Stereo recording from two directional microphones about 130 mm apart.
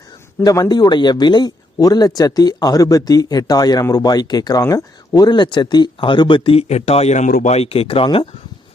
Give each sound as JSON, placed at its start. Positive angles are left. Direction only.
{"t": 0.4, "sound": "speech", "side_deg": 25}
{"t": 7.5, "sound": "speech", "side_deg": 50}